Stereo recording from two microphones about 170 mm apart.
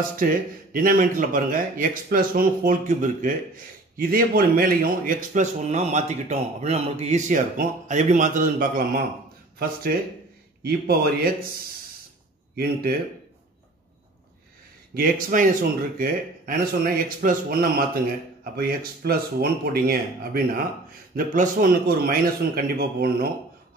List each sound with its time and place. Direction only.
0.2 s a man's voice: 55° right (ahead or behind)
15.0 s a man's voice: 55° right (ahead or behind)